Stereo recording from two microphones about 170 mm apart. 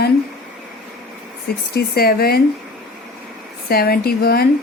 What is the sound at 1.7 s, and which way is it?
Speech, 65° left (ahead or behind).